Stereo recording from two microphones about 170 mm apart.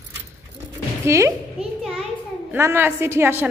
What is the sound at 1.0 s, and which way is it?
Speech, 15° right (ahead or behind).